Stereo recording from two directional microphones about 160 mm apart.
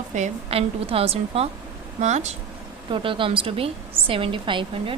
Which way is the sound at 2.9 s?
30° right (ahead or behind).